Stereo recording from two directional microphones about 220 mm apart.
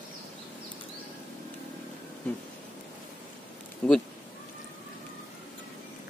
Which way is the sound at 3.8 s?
5° left (ahead or behind).